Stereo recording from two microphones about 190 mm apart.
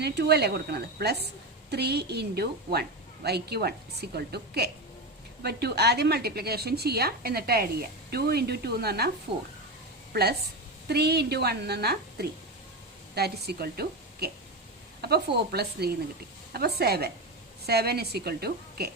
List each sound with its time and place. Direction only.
0.0 s a woman's voice: 60° right (ahead or behind)
10.1 s a woman's voice: 55° right (ahead or behind)